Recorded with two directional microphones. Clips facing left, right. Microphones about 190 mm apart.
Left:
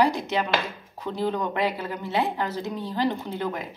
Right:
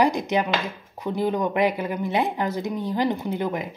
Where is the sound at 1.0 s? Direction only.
15° right (ahead or behind).